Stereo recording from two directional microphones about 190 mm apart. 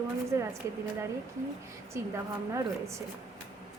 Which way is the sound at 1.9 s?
15° right (ahead or behind).